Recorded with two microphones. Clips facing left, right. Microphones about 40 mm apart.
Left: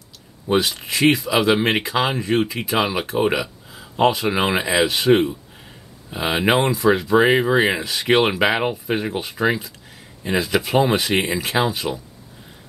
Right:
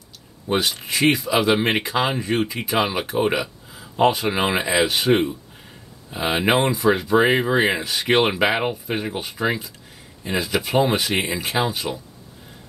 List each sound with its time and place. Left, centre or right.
0.5 s speech: centre